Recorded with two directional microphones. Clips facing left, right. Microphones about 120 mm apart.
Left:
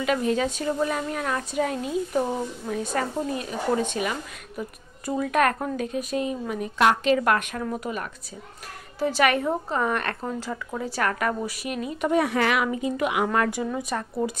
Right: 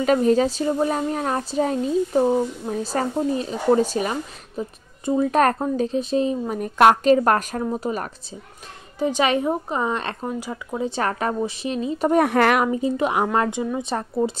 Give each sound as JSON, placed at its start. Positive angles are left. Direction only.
{"t": 0.0, "sound": "speech", "side_deg": -35}
{"t": 7.1, "sound": "speech", "side_deg": -35}
{"t": 9.0, "sound": "a woman's voice", "side_deg": -20}
{"t": 12.1, "sound": "a woman's voice", "side_deg": -50}
{"t": 12.6, "sound": "a woman's voice", "side_deg": -30}